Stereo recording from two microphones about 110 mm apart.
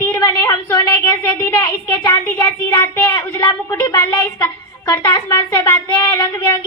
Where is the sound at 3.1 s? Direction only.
30° left (ahead or behind).